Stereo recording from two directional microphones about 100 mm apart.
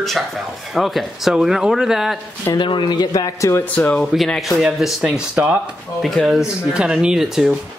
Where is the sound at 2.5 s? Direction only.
50° left (ahead or behind); by 3.6 s 30° left (ahead or behind).